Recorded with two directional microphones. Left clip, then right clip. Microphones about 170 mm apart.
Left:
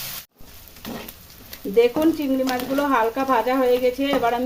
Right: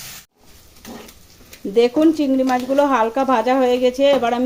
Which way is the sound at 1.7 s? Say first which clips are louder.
Right 3 dB; 50° right (ahead or behind).